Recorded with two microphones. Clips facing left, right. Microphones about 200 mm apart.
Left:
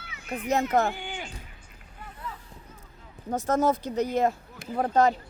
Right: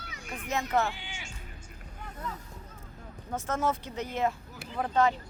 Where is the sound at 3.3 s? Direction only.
40° left (ahead or behind).